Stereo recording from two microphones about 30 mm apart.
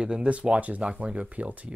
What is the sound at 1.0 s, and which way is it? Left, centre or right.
Speech, right.